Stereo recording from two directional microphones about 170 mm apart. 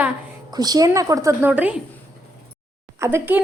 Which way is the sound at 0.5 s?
25° right (ahead or behind).